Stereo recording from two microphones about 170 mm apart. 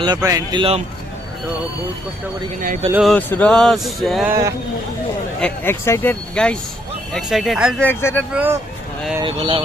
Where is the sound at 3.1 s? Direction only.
10° left (ahead or behind).